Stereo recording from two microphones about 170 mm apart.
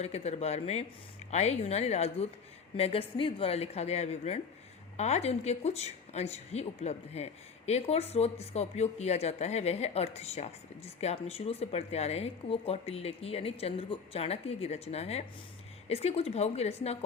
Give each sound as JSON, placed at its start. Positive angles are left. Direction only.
{"t": 0.0, "sound": "a woman's voice", "side_deg": 40}